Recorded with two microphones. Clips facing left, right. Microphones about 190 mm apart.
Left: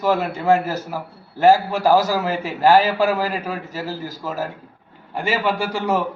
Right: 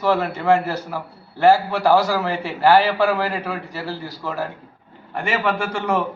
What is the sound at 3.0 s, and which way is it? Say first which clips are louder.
Speech: even; 5° left (ahead or behind).